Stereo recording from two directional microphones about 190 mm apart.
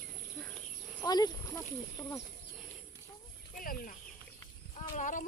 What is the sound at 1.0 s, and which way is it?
Speech, 20° left (ahead or behind).